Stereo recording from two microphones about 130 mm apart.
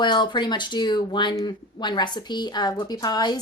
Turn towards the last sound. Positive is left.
turn(degrees=30)  # may be behind; listen again after turning